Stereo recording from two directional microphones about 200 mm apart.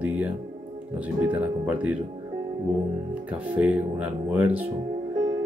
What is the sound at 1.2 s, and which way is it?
Speech, 5° right (ahead or behind).